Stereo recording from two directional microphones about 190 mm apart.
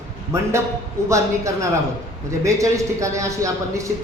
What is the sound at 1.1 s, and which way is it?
A man's voice, 15° right (ahead or behind).